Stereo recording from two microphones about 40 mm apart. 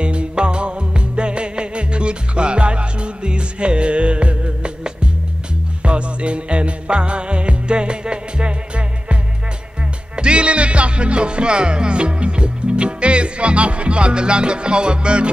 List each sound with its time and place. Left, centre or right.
0.0 s music: right